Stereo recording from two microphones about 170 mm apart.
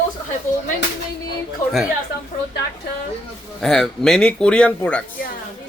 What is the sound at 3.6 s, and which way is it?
A man's voice, 5° left (ahead or behind).